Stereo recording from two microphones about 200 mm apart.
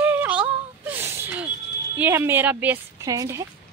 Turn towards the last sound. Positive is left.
turn(degrees=-15)  # may be behind; listen again after turning